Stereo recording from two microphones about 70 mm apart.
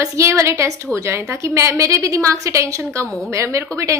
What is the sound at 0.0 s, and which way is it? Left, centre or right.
A woman's voice, right.